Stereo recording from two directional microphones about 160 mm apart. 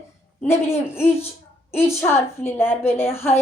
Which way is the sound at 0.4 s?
15° left (ahead or behind).